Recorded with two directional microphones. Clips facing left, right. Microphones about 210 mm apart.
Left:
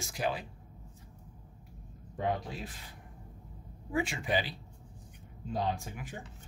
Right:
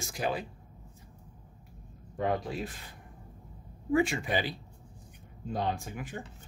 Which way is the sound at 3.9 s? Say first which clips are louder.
Right 5 dB; 50° right (ahead or behind).